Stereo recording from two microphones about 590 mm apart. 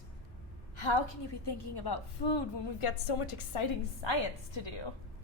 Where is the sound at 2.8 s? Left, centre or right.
Left.